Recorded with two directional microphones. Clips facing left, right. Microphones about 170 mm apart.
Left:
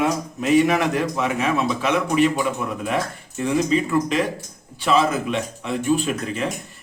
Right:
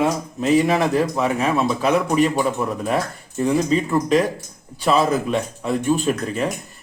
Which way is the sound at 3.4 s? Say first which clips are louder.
Right 1 dB; 40° right (ahead or behind).